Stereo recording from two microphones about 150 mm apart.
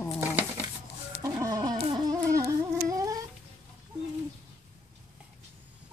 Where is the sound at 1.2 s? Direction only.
25° right (ahead or behind).